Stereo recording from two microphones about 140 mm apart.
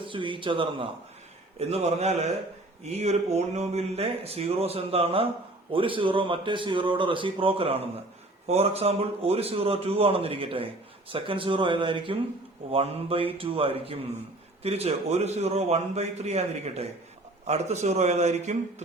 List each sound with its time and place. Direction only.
0.0 s a man's voice: 35° right (ahead or behind)
1.5 s a man's voice: 50° right (ahead or behind)